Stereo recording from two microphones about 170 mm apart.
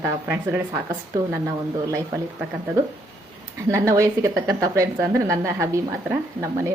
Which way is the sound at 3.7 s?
15° right (ahead or behind).